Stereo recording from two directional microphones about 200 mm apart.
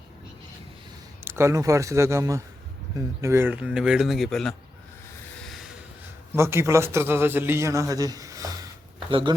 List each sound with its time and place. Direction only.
1.2 s a man's voice: 10° right (ahead or behind)
5.4 s a sound: centre (ahead or behind)
6.3 s a man's voice: 15° right (ahead or behind)